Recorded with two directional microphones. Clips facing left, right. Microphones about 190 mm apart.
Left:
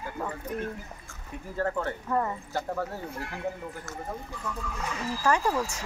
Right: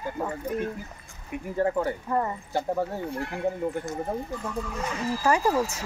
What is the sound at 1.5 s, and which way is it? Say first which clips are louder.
Speech: right 4 dB; 15° right (ahead or behind).